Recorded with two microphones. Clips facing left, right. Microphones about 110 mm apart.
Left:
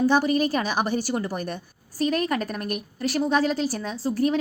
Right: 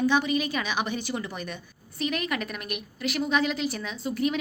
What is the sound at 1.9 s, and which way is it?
A woman's voice, 35° left (ahead or behind).